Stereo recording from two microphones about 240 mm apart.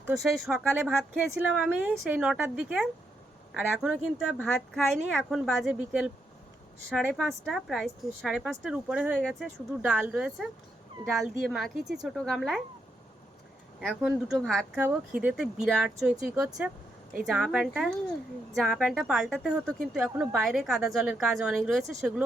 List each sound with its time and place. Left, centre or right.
0.1 s a woman's voice: centre
13.8 s a woman's voice: centre
16.3 s speech: centre
16.6 s a sound: centre
17.2 s a woman's voice: centre